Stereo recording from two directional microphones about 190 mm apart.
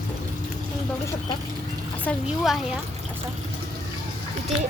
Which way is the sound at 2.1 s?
Centre (ahead or behind).